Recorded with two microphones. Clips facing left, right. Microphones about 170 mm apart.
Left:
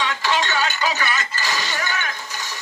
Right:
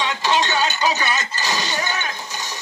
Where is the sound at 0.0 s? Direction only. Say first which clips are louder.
Right 2 dB; 20° right (ahead or behind).